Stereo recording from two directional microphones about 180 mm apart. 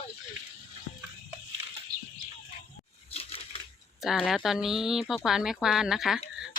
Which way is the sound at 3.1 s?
35° left (ahead or behind).